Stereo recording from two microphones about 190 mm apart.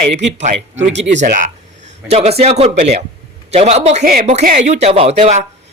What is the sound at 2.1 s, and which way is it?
Speech, 35° right (ahead or behind).